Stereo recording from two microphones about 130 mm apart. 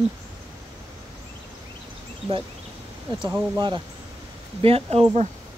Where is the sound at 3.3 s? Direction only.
30° right (ahead or behind).